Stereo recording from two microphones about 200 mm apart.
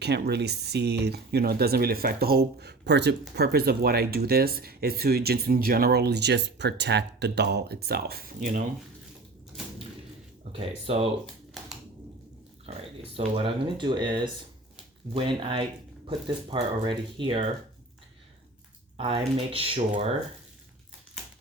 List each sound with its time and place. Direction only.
0.0 s speech: 55° right (ahead or behind)
10.6 s speech: 30° right (ahead or behind)
13.1 s speech: 30° right (ahead or behind)
18.9 s speech: 25° right (ahead or behind)